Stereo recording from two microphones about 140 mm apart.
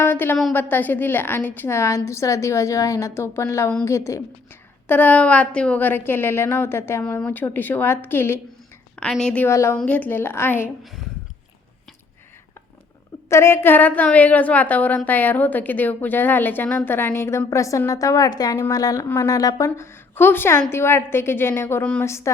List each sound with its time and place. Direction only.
0.0 s a woman's voice: 15° left (ahead or behind)
9.0 s a woman's voice: 5° left (ahead or behind)
13.3 s a woman's voice: 20° left (ahead or behind)